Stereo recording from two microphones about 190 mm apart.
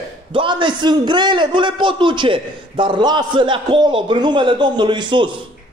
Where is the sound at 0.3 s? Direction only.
25° right (ahead or behind).